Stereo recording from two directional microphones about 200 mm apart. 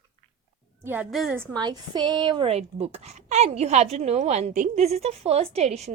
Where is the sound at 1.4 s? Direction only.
20° right (ahead or behind).